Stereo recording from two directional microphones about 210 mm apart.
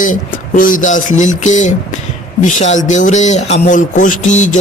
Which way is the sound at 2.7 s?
35° left (ahead or behind).